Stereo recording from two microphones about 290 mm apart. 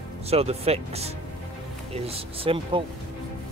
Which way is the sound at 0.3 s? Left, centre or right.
Right.